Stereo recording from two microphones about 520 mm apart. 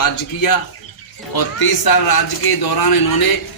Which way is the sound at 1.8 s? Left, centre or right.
Left.